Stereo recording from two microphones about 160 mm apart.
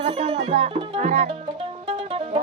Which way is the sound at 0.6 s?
35° right (ahead or behind).